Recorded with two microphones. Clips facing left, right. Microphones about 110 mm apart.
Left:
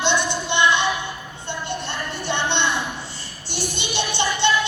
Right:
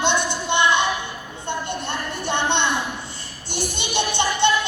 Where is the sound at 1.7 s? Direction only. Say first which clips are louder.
Right 1 dB; 50° right (ahead or behind).